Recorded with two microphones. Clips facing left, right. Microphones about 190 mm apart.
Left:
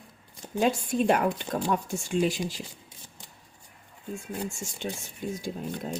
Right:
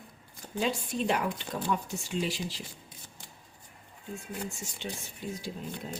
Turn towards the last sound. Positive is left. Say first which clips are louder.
# left 4 dB
turn(degrees=45)  # may be behind; listen again after turning